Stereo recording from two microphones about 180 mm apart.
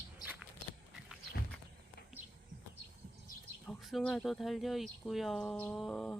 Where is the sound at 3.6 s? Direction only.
5° left (ahead or behind).